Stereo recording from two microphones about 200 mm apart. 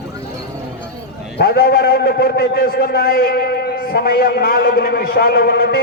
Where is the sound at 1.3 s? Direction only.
50° left (ahead or behind).